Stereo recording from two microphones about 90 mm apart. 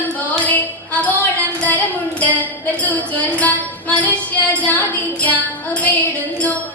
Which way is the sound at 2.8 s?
20° left (ahead or behind).